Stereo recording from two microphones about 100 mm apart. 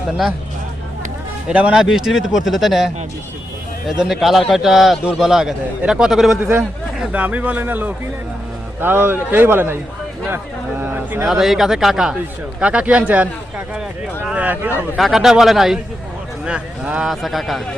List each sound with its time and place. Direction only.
1.5 s a man's voice: 10° right (ahead or behind)
4.0 s a man's voice: centre (ahead or behind)
7.1 s a man's voice: 15° right (ahead or behind)
11.3 s a man's voice: 5° right (ahead or behind)
14.3 s speech: 15° right (ahead or behind)
14.9 s a man's voice: centre (ahead or behind)
17.1 s a man's voice: centre (ahead or behind)